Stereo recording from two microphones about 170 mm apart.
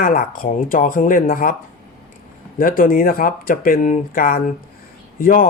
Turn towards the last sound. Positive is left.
turn(degrees=55)  # may be behind; listen again after turning